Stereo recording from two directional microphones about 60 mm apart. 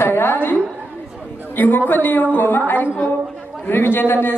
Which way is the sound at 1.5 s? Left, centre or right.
Left.